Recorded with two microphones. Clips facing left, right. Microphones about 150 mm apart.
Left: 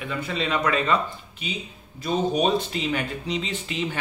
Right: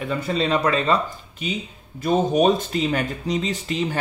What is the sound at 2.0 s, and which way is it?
Speech, 45° right (ahead or behind).